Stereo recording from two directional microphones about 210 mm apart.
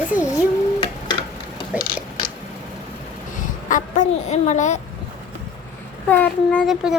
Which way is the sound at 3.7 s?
35° left (ahead or behind).